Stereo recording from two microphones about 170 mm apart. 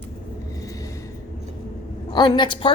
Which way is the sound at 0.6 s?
20° left (ahead or behind).